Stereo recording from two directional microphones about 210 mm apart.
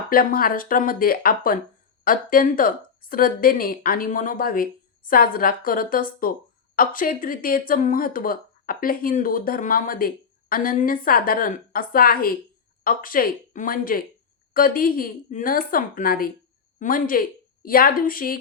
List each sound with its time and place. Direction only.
0.1 s speech: 45° left (ahead or behind)